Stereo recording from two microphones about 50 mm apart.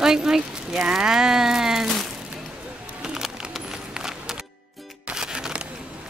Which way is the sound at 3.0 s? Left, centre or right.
Centre.